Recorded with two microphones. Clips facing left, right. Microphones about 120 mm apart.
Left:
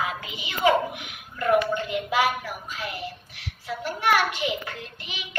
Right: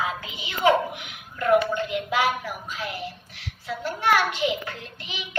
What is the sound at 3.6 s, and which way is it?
Speech, 10° left (ahead or behind).